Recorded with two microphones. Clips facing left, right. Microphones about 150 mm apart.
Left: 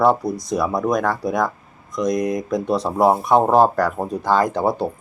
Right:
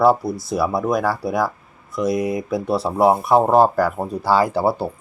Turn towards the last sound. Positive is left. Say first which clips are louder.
# even
turn(degrees=-5)  # may be behind; listen again after turning